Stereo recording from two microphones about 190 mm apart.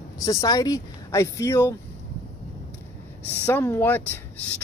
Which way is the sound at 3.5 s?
10° left (ahead or behind).